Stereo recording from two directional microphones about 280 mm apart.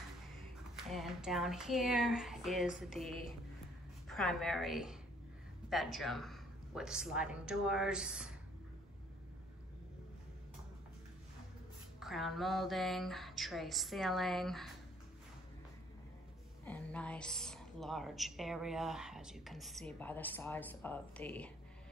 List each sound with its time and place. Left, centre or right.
0.8 s a woman's voice: centre
12.0 s a woman's voice: centre
16.6 s a woman's voice: centre